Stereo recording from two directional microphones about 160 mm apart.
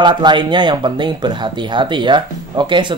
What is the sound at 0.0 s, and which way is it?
Speech, 30° right (ahead or behind).